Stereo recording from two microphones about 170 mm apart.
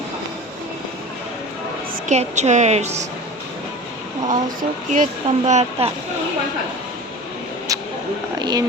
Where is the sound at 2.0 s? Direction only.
40° right (ahead or behind).